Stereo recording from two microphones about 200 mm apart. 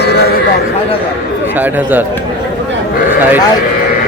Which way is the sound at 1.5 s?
10° right (ahead or behind).